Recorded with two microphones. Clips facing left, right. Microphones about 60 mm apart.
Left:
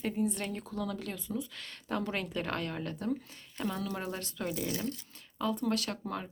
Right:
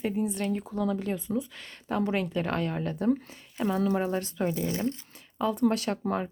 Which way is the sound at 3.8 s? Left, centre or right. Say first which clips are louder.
Right 10 dB; right.